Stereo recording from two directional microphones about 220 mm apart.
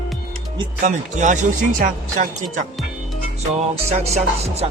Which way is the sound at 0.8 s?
35° right (ahead or behind).